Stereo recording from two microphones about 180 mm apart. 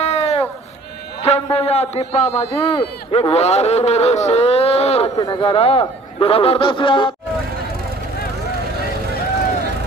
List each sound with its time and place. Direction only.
0.0 s sheep: 35° left (ahead or behind)
1.2 s a man's voice: 35° left (ahead or behind)
5.1 s speech: 25° left (ahead or behind)